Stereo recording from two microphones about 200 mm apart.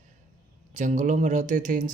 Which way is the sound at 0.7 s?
35° right (ahead or behind).